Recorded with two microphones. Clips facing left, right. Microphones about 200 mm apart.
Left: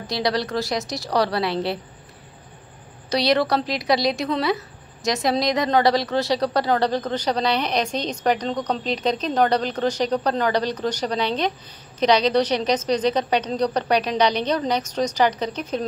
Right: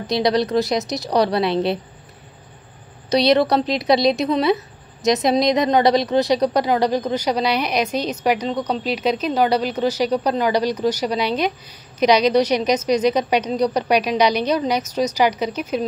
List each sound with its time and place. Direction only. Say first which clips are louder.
0.0 s a woman's voice: right 5 dB; 20° right (ahead or behind)
3.1 s a woman's voice: right 4 dB; 20° right (ahead or behind)